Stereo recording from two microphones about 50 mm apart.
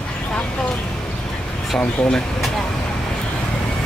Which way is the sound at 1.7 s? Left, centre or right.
Centre.